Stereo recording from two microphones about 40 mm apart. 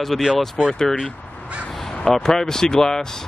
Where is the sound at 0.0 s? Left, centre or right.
Centre.